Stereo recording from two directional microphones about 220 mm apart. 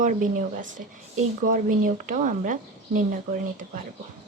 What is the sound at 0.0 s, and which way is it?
Speech, 35° right (ahead or behind).